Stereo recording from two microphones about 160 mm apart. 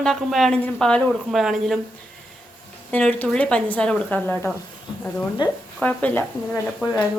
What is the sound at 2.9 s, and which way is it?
Speech, 10° left (ahead or behind).